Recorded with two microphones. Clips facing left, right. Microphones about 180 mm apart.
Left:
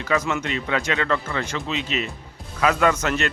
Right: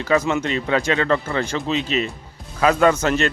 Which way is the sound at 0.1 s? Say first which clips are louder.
Right 4 dB; 30° right (ahead or behind).